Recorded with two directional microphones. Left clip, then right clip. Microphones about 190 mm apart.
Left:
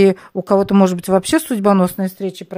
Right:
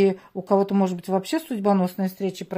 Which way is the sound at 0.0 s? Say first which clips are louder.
Left 8 dB; 45° left (ahead or behind).